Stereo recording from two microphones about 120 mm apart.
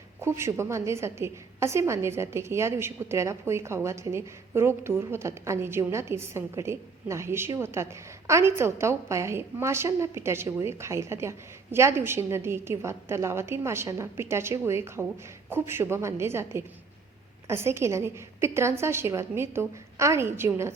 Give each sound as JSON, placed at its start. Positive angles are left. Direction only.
{"t": 0.2, "sound": "a woman's voice", "side_deg": -20}